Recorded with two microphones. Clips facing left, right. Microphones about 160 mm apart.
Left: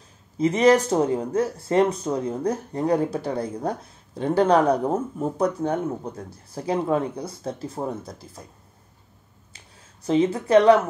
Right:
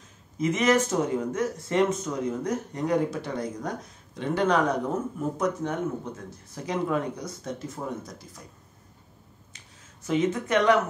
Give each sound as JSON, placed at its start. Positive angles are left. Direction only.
{"t": 0.4, "sound": "speech", "side_deg": 35}
{"t": 10.0, "sound": "speech", "side_deg": 30}